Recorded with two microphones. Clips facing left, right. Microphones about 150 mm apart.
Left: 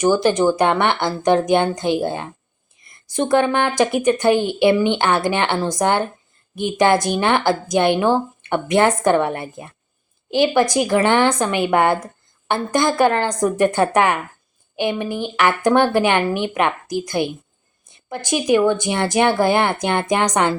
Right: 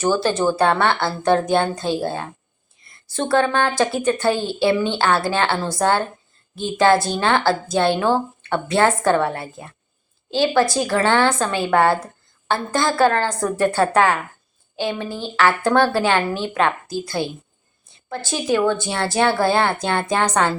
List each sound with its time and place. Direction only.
0.0 s a woman's voice: 15° left (ahead or behind)